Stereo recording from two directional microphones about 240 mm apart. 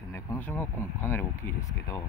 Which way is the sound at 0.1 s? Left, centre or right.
Centre.